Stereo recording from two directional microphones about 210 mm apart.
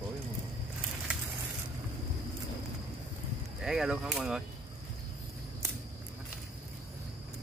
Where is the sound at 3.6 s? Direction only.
Centre (ahead or behind).